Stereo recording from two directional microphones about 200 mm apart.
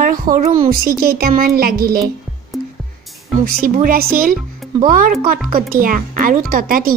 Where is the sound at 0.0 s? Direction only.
45° right (ahead or behind).